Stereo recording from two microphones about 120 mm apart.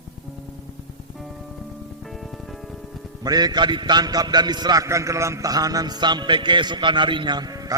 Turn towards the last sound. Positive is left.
turn(degrees=-30)  # may be behind; listen again after turning